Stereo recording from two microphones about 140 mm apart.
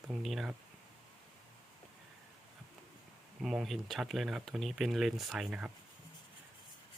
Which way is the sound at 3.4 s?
Centre (ahead or behind).